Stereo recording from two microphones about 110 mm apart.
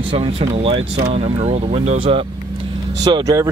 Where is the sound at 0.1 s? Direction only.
60° right (ahead or behind).